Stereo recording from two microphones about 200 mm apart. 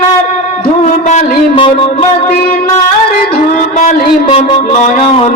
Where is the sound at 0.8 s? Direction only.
35° left (ahead or behind).